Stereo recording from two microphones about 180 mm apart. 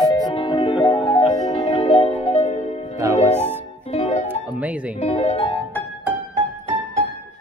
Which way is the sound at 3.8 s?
35° left (ahead or behind).